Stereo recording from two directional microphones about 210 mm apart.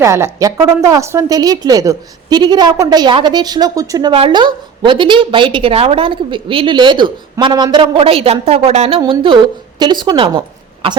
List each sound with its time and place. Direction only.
0.0 s a woman's voice: 15° right (ahead or behind)